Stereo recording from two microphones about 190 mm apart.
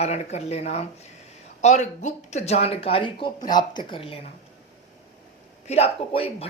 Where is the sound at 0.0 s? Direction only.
35° left (ahead or behind).